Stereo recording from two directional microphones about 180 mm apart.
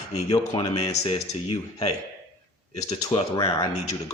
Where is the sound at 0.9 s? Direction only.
35° left (ahead or behind).